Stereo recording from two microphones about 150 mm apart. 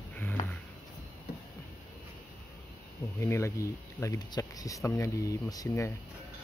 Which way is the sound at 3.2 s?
20° left (ahead or behind).